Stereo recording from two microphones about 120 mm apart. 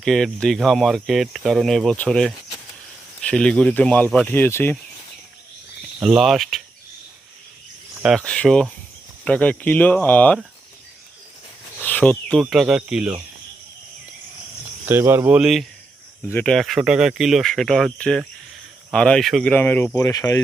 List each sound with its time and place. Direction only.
0.0 s speech: 5° left (ahead or behind)
6.0 s speech: 5° right (ahead or behind)
8.2 s speech: 10° left (ahead or behind)
11.8 s speech: 15° left (ahead or behind)
12.5 s speech: 5° right (ahead or behind)
14.8 s speech: 20° right (ahead or behind)
15.4 s speech: centre (ahead or behind)
16.2 s speech: 15° left (ahead or behind)
16.6 s speech: centre (ahead or behind); by 20.1 s 15° left (ahead or behind)
20.1 s speech: 25° left (ahead or behind)